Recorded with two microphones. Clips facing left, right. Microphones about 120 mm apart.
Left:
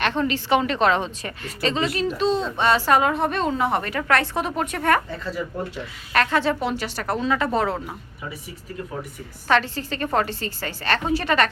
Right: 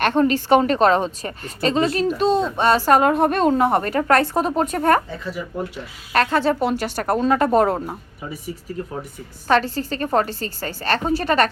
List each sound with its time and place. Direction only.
0.0 s a woman's voice: 45° right (ahead or behind)
4.9 s speech: 15° right (ahead or behind)
6.1 s a woman's voice: 35° right (ahead or behind)